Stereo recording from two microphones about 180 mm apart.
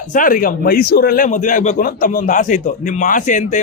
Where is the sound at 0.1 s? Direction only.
50° left (ahead or behind).